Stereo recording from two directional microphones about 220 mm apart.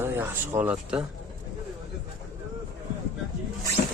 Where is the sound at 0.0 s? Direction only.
10° right (ahead or behind).